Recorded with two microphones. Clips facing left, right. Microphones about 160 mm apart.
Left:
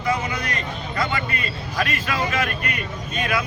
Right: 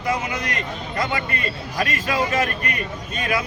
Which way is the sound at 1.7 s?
40° right (ahead or behind).